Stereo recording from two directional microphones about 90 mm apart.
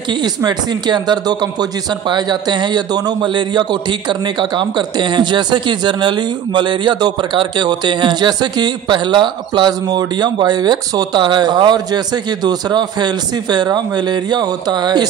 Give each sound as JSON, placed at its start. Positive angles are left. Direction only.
{"t": 0.1, "sound": "speech", "side_deg": -55}